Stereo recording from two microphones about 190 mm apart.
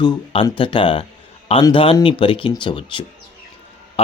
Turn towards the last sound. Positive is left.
turn(degrees=25)  # may be behind; listen again after turning